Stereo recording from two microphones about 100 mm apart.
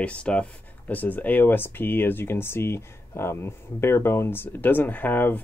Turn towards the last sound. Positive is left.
turn(degrees=20)  # may be behind; listen again after turning